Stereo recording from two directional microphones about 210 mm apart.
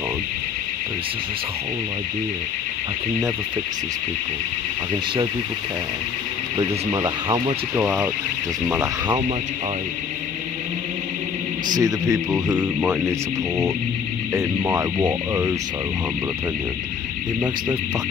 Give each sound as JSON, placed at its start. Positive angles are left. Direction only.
{"t": 6.6, "sound": "speech", "side_deg": -20}
{"t": 11.7, "sound": "speech", "side_deg": -15}
{"t": 14.3, "sound": "speech", "side_deg": -10}